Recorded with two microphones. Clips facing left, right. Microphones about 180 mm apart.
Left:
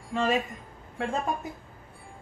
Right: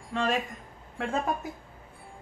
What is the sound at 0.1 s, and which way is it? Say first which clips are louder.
A man's voice: left 2 dB; centre (ahead or behind).